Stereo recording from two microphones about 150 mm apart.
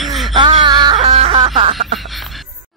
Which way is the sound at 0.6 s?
30° right (ahead or behind).